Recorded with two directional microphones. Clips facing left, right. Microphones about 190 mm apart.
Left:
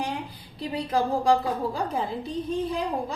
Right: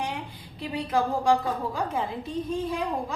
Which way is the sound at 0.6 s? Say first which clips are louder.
Left 1 dB; 35° left (ahead or behind).